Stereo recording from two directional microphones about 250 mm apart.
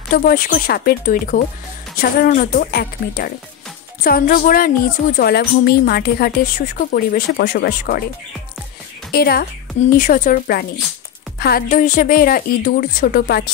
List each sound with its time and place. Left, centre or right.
0.1 s a woman's voice: left
9.1 s a woman's voice: left